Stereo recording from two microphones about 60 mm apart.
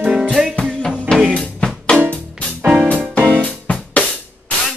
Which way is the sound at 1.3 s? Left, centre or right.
Centre.